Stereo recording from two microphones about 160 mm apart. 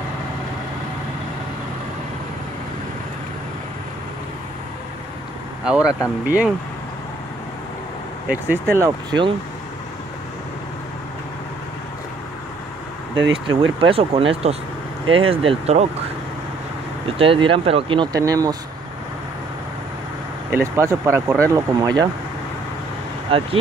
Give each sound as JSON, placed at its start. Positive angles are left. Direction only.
{"t": 5.7, "sound": "speech", "side_deg": -5}
{"t": 8.7, "sound": "speech", "side_deg": -20}
{"t": 13.1, "sound": "speech", "side_deg": -35}
{"t": 17.2, "sound": "speech", "side_deg": -35}
{"t": 20.5, "sound": "speech", "side_deg": -15}
{"t": 23.3, "sound": "speech", "side_deg": -35}